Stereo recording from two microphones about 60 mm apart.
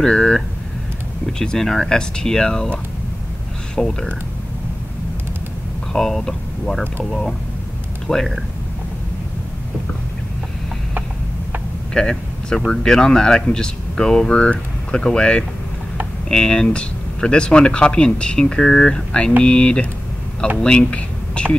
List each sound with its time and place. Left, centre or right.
0.0 s speech: centre
5.9 s speech: centre
11.9 s speech: centre